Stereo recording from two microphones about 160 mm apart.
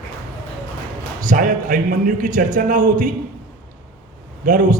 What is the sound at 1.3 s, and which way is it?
A man's voice, 60° right (ahead or behind).